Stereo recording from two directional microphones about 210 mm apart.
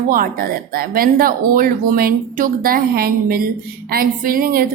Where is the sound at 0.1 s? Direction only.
45° right (ahead or behind).